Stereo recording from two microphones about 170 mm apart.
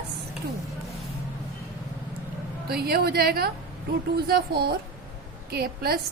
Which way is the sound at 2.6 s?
65° right (ahead or behind).